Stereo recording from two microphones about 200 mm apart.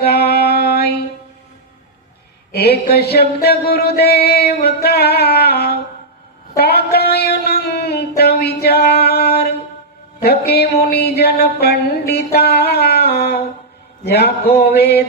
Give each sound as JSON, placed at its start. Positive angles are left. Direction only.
{"t": 0.0, "sound": "music", "side_deg": 50}
{"t": 2.5, "sound": "mantra", "side_deg": 55}
{"t": 6.6, "sound": "a sound", "side_deg": 55}
{"t": 14.0, "sound": "mantra", "side_deg": 55}